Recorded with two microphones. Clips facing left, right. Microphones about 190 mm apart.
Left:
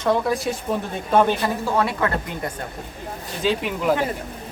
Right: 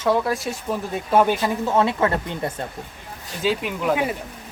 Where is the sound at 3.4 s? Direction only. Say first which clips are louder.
Even; centre (ahead or behind).